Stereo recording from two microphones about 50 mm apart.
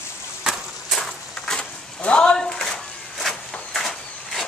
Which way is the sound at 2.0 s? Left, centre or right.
Left.